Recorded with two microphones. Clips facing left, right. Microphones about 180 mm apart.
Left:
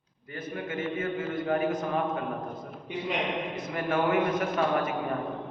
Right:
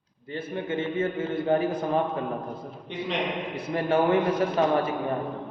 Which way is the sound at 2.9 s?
10° left (ahead or behind).